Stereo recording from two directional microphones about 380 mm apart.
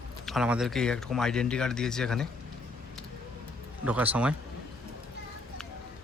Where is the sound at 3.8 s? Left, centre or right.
Centre.